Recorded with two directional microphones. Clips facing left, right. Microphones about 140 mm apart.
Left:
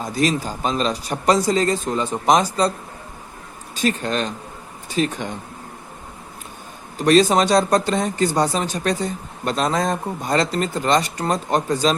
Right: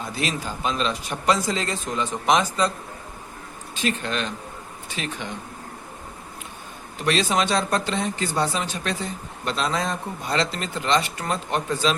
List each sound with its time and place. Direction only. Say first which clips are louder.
0.0 s speech: left 7 dB; 40° left (ahead or behind)
3.8 s speech: left 5 dB; 40° left (ahead or behind)
7.0 s speech: left 8 dB; 40° left (ahead or behind)